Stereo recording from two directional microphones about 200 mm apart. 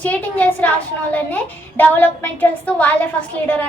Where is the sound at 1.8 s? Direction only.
10° left (ahead or behind).